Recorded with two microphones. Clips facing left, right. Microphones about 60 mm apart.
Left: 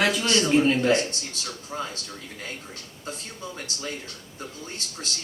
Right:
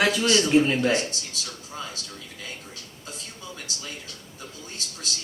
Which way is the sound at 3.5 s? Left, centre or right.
Left.